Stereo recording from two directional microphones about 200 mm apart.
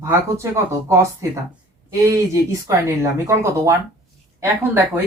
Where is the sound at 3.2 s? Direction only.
15° right (ahead or behind).